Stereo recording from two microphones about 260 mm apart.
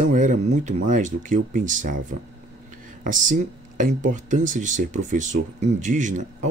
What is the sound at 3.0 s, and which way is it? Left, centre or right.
Speech, right.